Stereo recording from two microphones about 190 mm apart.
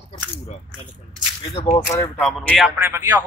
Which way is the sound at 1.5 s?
30° left (ahead or behind).